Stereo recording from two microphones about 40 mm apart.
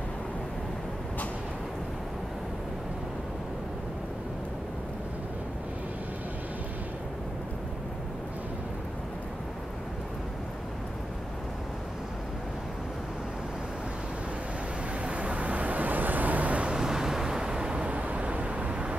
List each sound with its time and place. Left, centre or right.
15.0 s vehicle: right
16.7 s vehicle: centre; by 18.9 s right